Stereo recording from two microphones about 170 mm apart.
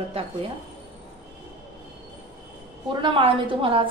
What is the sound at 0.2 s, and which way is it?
Speech, 35° right (ahead or behind).